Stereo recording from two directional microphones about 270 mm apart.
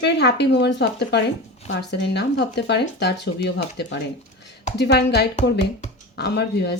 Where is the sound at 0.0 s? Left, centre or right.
Left.